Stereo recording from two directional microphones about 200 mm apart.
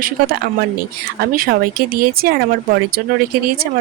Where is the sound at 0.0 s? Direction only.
50° right (ahead or behind).